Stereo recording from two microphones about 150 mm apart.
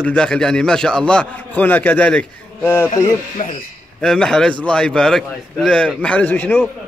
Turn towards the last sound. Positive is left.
turn(degrees=10)  # may be behind; listen again after turning